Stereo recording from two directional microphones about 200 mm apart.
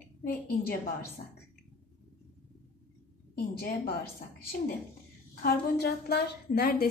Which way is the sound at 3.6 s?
55° left (ahead or behind).